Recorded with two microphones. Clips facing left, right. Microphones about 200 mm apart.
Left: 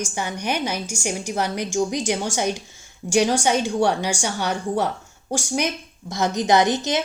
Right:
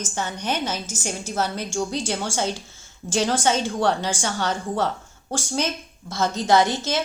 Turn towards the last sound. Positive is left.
turn(degrees=20)  # may be behind; listen again after turning